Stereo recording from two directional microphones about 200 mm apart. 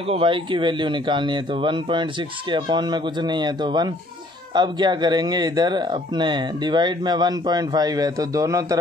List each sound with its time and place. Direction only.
0.0 s speech: 25° right (ahead or behind)